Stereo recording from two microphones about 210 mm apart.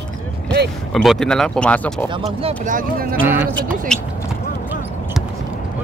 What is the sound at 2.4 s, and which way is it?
Speech, 40° right (ahead or behind).